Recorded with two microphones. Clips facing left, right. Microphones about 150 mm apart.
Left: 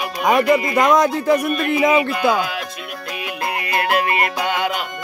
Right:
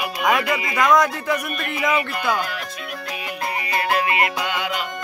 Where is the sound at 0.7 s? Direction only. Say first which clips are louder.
Left 3 dB; 25° left (ahead or behind).